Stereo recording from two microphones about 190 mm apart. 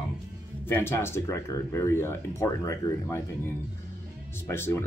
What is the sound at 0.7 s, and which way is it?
Speech, 15° left (ahead or behind).